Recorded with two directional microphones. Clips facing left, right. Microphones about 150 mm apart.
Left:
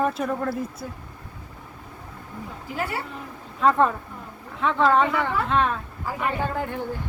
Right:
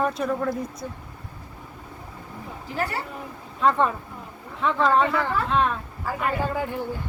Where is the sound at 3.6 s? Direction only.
Centre (ahead or behind).